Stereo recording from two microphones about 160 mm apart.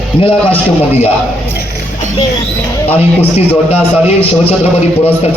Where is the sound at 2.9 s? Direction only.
40° left (ahead or behind).